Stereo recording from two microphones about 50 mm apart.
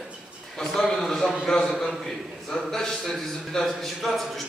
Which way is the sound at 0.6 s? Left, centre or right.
Centre.